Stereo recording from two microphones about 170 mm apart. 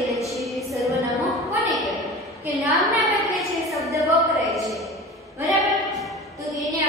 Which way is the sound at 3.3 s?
Centre (ahead or behind).